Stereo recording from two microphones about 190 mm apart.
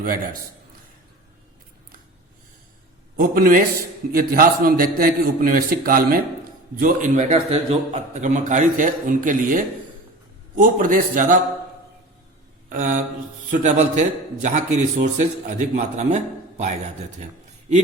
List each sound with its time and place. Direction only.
0.0 s a man's voice: 50° right (ahead or behind)
3.2 s a man's voice: 50° right (ahead or behind)
12.6 s mantra: 45° right (ahead or behind)
13.5 s a man's voice: 40° right (ahead or behind)